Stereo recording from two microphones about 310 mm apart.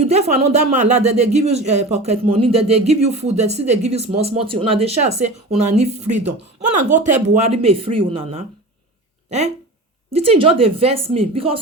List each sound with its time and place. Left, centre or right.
0.0 s speech: centre
10.1 s speech: centre